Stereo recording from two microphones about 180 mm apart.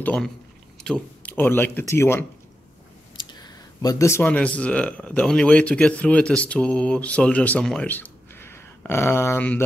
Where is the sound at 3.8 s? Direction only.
20° left (ahead or behind).